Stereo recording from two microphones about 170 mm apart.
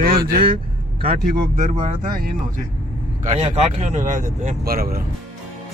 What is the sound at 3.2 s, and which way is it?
Speech, 40° right (ahead or behind).